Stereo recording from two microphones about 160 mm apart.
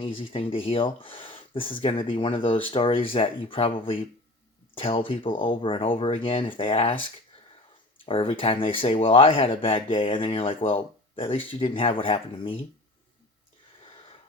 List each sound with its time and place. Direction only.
0.0 s speech: 35° left (ahead or behind)
8.0 s speech: 35° left (ahead or behind)